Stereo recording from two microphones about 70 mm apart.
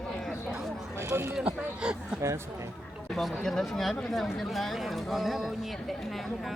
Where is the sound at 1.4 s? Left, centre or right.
Centre.